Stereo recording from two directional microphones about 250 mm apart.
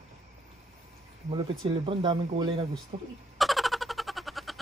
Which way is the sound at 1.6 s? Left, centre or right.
Right.